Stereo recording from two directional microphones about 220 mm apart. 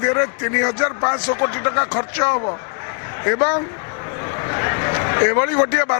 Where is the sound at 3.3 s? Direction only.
20° left (ahead or behind).